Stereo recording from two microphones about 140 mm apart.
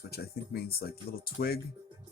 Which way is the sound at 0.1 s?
90° left.